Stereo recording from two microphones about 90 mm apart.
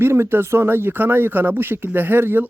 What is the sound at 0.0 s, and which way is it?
Speech, 25° right (ahead or behind).